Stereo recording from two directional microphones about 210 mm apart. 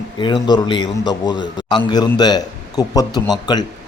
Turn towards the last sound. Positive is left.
turn(degrees=20)  # may be behind; listen again after turning